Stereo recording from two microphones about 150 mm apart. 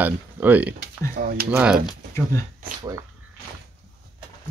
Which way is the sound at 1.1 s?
85° right.